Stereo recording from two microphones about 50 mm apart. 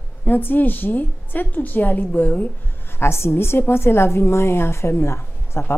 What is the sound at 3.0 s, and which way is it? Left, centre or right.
A woman's voice, left.